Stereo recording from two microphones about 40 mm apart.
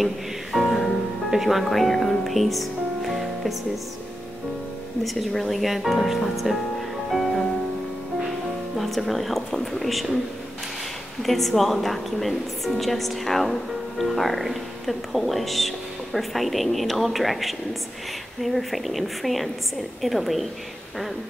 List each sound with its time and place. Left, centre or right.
0.0 s music: centre
1.3 s speech: centre
5.0 s a woman's voice: centre
7.1 s music: centre
8.7 s a woman's voice: centre
11.2 s a woman's voice: centre